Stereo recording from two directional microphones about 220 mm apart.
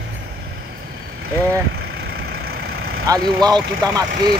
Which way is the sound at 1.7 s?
45° right (ahead or behind).